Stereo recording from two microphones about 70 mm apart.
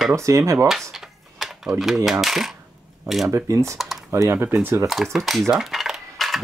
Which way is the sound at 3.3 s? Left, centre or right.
Right.